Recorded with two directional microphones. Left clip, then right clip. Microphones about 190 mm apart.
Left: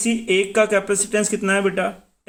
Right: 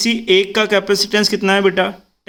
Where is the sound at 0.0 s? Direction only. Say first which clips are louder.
Right 6 dB; 30° right (ahead or behind).